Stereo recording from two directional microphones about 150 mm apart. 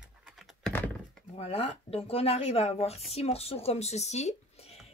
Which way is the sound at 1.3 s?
40° left (ahead or behind).